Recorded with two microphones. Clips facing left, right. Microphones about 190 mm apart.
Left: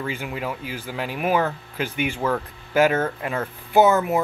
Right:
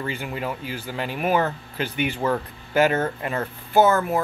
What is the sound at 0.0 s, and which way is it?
Speech, 5° left (ahead or behind).